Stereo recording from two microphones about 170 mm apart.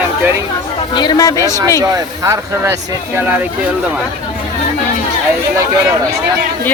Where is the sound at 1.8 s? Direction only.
20° right (ahead or behind).